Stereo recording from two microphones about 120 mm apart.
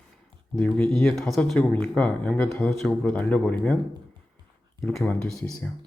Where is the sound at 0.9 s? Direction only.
Centre (ahead or behind).